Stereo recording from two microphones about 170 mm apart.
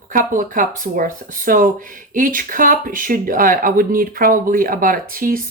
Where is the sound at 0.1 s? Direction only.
55° right (ahead or behind).